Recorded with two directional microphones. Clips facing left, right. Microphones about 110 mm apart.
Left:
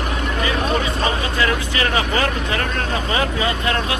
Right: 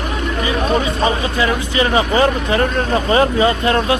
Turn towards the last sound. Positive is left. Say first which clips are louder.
# right 6 dB
turn(degrees=-30)  # may be behind; listen again after turning